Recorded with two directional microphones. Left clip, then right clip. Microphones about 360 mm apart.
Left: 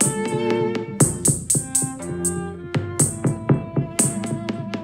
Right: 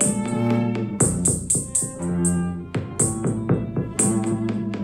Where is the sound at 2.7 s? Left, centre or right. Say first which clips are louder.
Left 2 dB; left.